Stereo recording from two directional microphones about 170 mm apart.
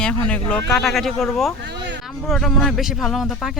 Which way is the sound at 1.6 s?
90° right.